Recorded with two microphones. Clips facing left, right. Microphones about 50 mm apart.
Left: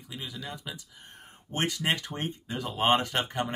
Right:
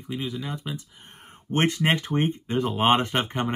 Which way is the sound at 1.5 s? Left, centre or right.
Right.